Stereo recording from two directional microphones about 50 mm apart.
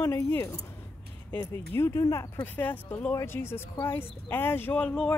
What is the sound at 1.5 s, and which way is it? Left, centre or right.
Speech, left.